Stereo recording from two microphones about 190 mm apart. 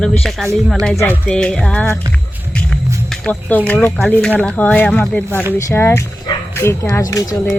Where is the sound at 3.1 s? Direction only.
5° left (ahead or behind).